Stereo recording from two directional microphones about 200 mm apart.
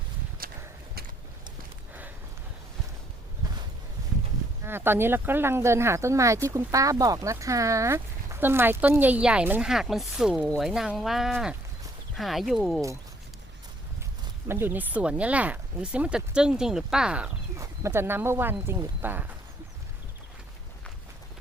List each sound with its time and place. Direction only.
0.4 s horse: 45° right (ahead or behind)
4.6 s speech: 10° right (ahead or behind)
14.4 s speech: 10° right (ahead or behind)